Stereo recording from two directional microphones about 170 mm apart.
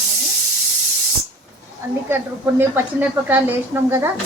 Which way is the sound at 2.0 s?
15° right (ahead or behind).